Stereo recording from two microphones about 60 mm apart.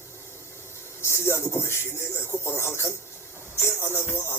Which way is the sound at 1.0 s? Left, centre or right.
Left.